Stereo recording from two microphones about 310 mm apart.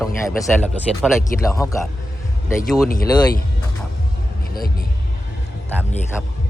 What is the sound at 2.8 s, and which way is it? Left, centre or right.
Speech, left.